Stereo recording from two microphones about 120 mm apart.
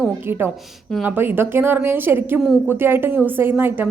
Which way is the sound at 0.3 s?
20° right (ahead or behind).